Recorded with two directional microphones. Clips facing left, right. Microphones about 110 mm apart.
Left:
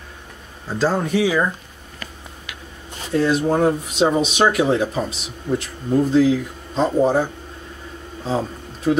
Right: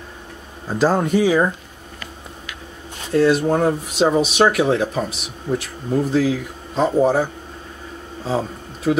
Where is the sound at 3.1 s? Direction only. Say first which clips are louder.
Right 2 dB; centre (ahead or behind).